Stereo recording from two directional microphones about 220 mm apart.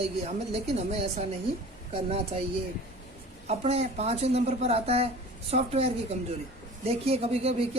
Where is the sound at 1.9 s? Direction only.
25° right (ahead or behind).